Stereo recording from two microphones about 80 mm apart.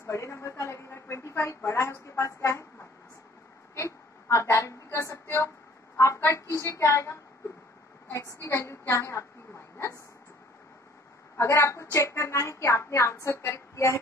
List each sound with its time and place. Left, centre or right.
0.0 s a woman's voice: left
3.7 s a sound: left
6.5 s a woman's voice: left
11.3 s a woman's voice: left